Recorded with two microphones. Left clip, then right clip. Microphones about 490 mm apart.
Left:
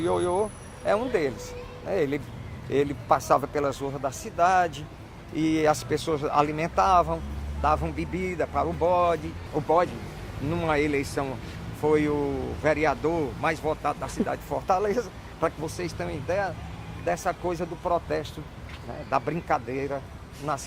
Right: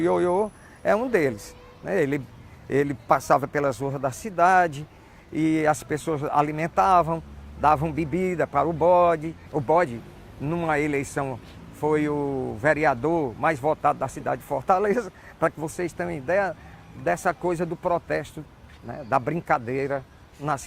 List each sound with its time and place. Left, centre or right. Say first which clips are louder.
0.0 s a man's voice: right 3 dB; right
5.4 s speech: right 1 dB; right
7.6 s a man's voice: right 4 dB; right
10.5 s speech: right 1 dB; right
17.1 s a man's voice: right 3 dB; right
20.4 s a man's voice: right 3 dB; right